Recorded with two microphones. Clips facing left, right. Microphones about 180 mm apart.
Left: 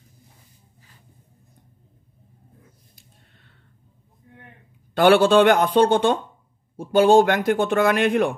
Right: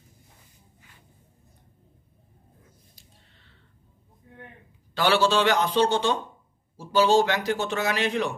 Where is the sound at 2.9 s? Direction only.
50° left (ahead or behind).